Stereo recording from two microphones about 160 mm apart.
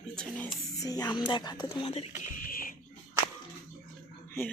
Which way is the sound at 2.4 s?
60° left (ahead or behind).